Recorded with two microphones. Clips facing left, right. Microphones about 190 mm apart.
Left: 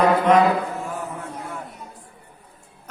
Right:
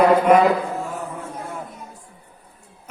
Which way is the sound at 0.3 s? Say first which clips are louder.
Right 1 dB; 10° right (ahead or behind).